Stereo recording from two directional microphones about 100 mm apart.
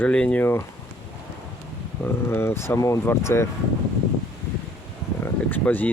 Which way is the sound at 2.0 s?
25° left (ahead or behind).